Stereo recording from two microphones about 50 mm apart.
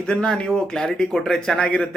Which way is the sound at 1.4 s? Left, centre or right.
Centre.